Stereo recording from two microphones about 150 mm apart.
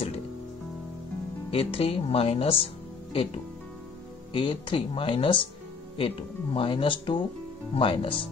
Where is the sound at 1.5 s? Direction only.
40° left (ahead or behind).